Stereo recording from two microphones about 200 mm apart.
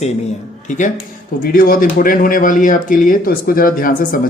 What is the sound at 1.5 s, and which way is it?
Speech, 45° left (ahead or behind).